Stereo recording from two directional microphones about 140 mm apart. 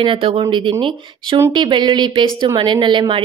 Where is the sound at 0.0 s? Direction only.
40° right (ahead or behind).